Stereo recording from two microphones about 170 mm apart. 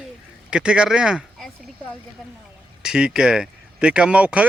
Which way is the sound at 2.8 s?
5° right (ahead or behind).